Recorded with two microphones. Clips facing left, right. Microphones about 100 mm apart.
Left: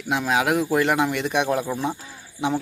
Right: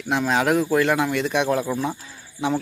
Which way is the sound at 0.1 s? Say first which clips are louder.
Right 1 dB; 5° left (ahead or behind).